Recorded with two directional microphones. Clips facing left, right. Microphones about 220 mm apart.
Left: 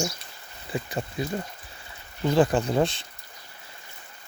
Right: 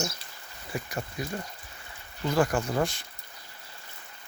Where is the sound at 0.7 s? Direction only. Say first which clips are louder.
Left 4 dB; 25° left (ahead or behind).